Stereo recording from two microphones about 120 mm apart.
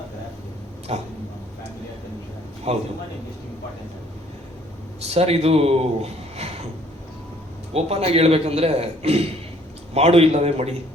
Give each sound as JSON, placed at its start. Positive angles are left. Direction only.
{"t": 0.9, "sound": "a man's voice", "side_deg": -60}
{"t": 2.7, "sound": "a man's voice", "side_deg": -60}
{"t": 5.0, "sound": "a man's voice", "side_deg": -60}
{"t": 7.7, "sound": "a man's voice", "side_deg": -60}